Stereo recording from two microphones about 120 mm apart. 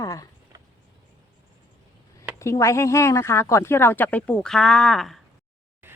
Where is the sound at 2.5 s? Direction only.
25° left (ahead or behind); by 5.2 s centre (ahead or behind).